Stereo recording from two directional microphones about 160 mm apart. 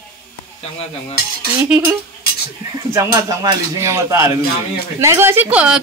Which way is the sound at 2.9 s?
15° right (ahead or behind).